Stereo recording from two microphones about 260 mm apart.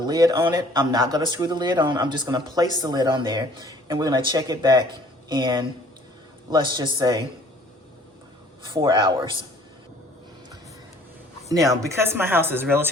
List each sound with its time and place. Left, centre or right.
0.0 s speech: centre
8.6 s speech: centre
11.4 s speech: centre